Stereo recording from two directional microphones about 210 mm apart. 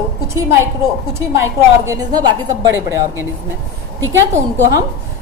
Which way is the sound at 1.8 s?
15° right (ahead or behind).